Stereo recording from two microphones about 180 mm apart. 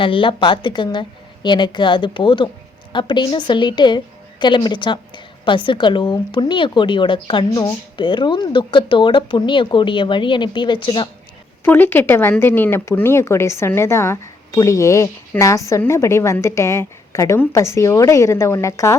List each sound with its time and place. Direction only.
0.0 s a woman's voice: 30° left (ahead or behind)
11.6 s speech: 10° left (ahead or behind)